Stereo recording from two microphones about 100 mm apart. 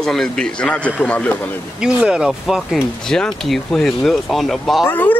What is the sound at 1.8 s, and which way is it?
Speech, 10° right (ahead or behind).